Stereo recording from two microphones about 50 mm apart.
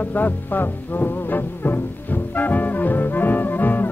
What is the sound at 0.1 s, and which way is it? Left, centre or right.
Music, left.